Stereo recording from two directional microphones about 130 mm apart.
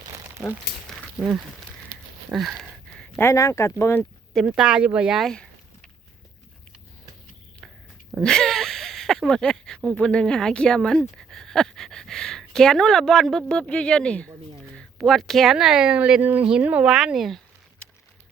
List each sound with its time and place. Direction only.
1.2 s speech: 5° right (ahead or behind)
2.3 s a sound: centre (ahead or behind)
3.2 s speech: 20° left (ahead or behind)
4.4 s speech: 5° right (ahead or behind)
8.2 s speech: 5° left (ahead or behind)
17.8 s a sound: 10° left (ahead or behind)